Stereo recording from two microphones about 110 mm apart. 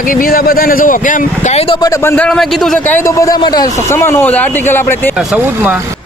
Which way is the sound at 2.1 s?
5° left (ahead or behind).